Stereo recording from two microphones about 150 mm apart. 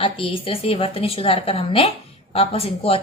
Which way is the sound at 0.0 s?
35° left (ahead or behind).